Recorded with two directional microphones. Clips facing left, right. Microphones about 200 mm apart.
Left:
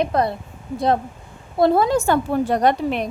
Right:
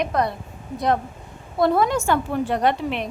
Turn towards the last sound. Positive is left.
turn(degrees=45)  # may be behind; listen again after turning